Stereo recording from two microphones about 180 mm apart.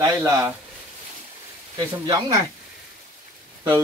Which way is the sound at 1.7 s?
20° right (ahead or behind).